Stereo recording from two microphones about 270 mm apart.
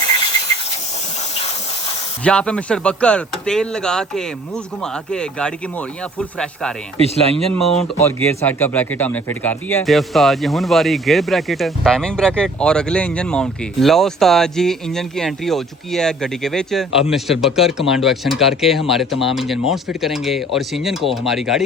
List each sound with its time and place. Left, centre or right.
2.2 s a man's voice: centre